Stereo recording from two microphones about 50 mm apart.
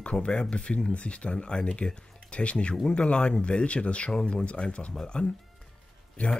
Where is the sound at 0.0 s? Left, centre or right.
Left.